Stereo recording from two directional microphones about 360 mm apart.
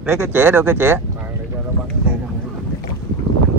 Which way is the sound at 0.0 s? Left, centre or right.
Centre.